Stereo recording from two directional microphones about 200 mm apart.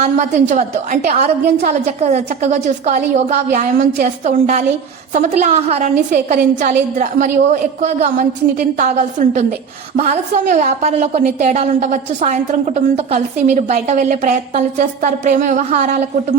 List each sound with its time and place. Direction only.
0.0 s a woman's voice: 35° right (ahead or behind)